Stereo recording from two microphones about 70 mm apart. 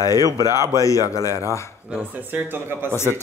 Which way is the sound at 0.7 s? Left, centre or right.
Left.